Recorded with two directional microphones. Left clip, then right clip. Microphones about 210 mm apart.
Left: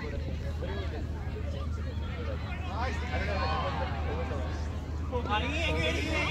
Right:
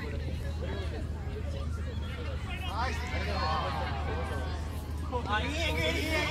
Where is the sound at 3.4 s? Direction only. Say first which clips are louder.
Right 2 dB; 20° right (ahead or behind).